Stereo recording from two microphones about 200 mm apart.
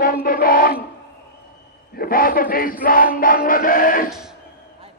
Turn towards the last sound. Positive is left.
turn(degrees=45)  # may be behind; listen again after turning